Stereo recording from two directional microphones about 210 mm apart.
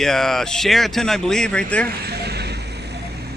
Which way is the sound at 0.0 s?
Centre (ahead or behind).